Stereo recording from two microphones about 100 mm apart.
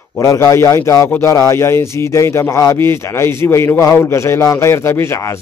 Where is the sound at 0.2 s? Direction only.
35° left (ahead or behind).